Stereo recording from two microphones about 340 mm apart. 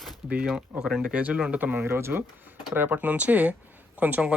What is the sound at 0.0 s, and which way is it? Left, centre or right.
Speech, centre.